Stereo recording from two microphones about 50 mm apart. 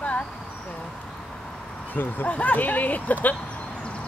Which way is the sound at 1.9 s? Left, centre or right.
Left.